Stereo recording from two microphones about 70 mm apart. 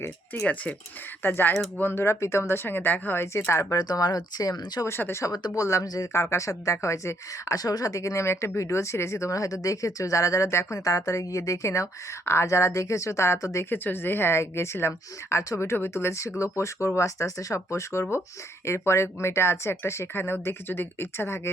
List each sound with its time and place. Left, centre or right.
0.4 s speech: centre
1.2 s speech: left
3.8 s speech: left
4.9 s speech: left
5.2 s speech: left
5.5 s a woman's voice: left
6.1 s a woman's voice: left
10.8 s a woman's voice: left
13.7 s a woman's voice: left